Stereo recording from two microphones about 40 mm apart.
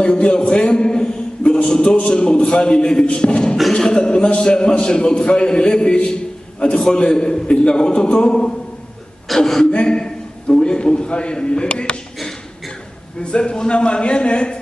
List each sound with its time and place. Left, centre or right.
0.0 s a man's voice: left
9.4 s speech: centre
9.7 s a man's voice: left
12.2 s a sound: centre
13.2 s a man's voice: left